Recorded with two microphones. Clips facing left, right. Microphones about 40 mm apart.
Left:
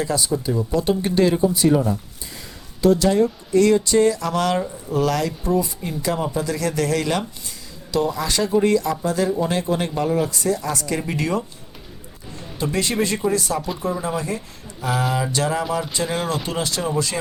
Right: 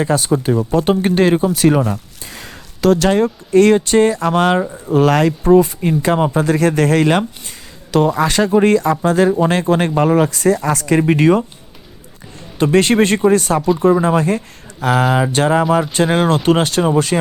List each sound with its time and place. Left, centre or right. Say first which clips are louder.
0.0 s speech: right 6 dB; right
12.5 s speech: right 10 dB; right
15.0 s a sound: right 6 dB; right
15.9 s speech: right 9 dB; right